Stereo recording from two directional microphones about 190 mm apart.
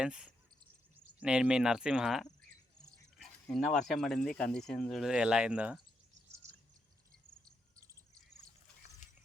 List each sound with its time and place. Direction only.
0.0 s speech: 5° right (ahead or behind)
9.0 s mechanisms: 40° left (ahead or behind)